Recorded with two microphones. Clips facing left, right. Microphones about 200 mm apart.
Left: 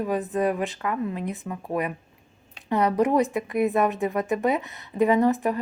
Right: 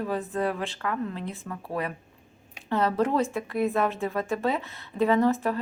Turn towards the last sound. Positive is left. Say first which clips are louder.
# left 2 dB
turn(degrees=15)  # may be behind; listen again after turning